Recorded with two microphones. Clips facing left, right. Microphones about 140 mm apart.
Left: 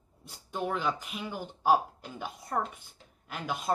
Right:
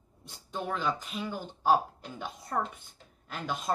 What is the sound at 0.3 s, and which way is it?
A woman's voice, 10° left (ahead or behind).